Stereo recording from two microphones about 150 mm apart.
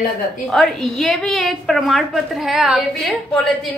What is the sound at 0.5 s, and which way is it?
A woman's voice, centre (ahead or behind).